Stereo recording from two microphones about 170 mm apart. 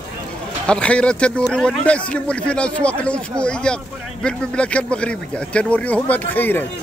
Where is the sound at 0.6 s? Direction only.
5° left (ahead or behind).